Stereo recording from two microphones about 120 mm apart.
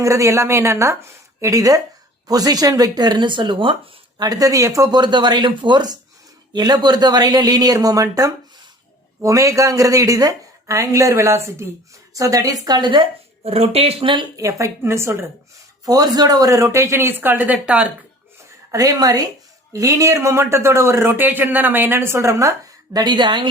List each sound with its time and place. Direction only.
0.0 s speech: 25° right (ahead or behind); by 3.8 s 45° right (ahead or behind)
4.2 s speech: 30° right (ahead or behind)
13.5 s speech: 55° right (ahead or behind)
14.3 s speech: 25° right (ahead or behind)
15.9 s speech: 30° right (ahead or behind); by 17.8 s 10° right (ahead or behind)
18.7 s speech: 30° right (ahead or behind)